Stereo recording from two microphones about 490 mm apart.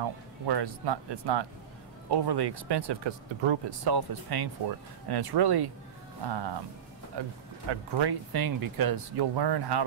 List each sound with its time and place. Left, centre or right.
0.0 s speech: right